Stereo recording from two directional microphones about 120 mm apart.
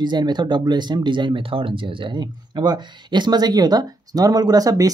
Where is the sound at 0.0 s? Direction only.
40° right (ahead or behind).